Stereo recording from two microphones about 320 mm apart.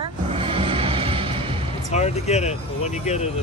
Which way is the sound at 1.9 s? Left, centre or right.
Left.